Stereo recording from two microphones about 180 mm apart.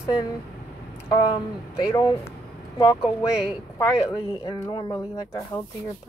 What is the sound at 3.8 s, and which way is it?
Speech, 20° left (ahead or behind).